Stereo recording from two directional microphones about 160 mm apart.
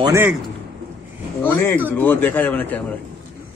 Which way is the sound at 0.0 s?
15° right (ahead or behind).